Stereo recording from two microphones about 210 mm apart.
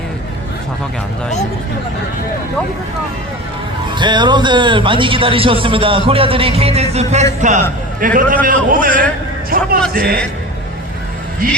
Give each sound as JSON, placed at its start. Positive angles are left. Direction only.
{"t": 3.9, "sound": "a man's voice", "side_deg": -20}
{"t": 8.0, "sound": "a man's voice", "side_deg": -40}
{"t": 11.4, "sound": "a man's voice", "side_deg": -40}